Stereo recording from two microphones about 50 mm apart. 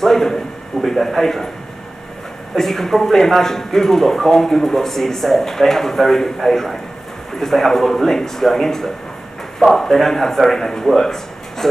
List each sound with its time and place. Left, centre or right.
0.0 s speech: centre
2.5 s speech: centre